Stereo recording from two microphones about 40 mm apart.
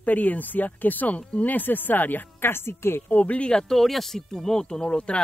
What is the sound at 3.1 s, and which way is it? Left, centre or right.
Speech, left.